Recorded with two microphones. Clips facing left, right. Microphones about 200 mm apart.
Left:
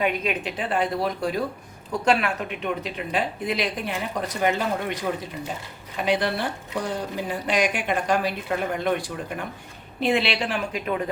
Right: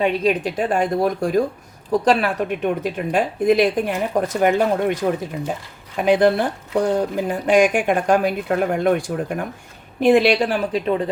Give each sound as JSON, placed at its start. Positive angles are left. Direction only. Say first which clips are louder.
{"t": 0.0, "sound": "a woman's voice", "louder": "right 6 dB", "side_deg": -30}
{"t": 1.9, "sound": "a woman's voice", "louder": "right 5 dB", "side_deg": -35}
{"t": 6.0, "sound": "a woman's voice", "louder": "right 8 dB", "side_deg": -50}